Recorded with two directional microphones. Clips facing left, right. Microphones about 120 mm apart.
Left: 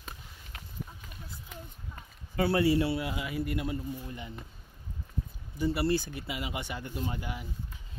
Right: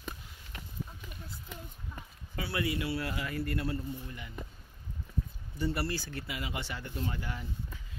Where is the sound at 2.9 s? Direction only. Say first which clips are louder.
Left 2 dB; 20° left (ahead or behind).